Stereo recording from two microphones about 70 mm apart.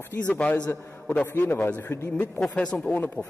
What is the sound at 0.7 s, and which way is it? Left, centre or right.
A man's voice, left.